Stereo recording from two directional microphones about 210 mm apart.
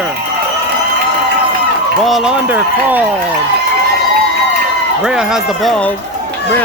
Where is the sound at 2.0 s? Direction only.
Centre (ahead or behind).